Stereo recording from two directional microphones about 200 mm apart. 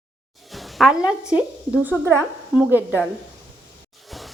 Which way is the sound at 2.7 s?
10° left (ahead or behind).